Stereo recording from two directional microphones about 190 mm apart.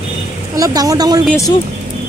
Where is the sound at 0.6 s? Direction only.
20° right (ahead or behind).